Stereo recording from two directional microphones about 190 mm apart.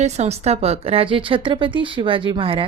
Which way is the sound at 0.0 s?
35° right (ahead or behind).